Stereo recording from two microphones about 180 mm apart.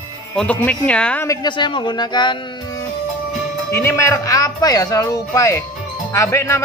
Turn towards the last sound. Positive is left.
turn(degrees=15)  # may be behind; listen again after turning